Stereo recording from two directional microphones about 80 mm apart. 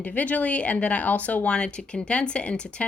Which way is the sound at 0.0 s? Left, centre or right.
Centre.